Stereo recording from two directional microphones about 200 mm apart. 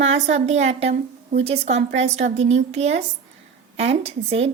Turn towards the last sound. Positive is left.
turn(degrees=-30)  # may be behind; listen again after turning